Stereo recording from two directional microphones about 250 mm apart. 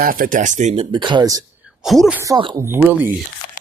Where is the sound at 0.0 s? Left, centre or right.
Right; by 1.5 s centre.